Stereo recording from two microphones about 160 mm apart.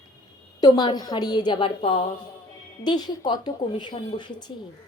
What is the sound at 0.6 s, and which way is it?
Speech, 25° left (ahead or behind).